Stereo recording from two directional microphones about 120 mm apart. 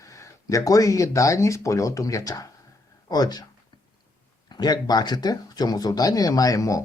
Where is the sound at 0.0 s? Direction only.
25° left (ahead or behind).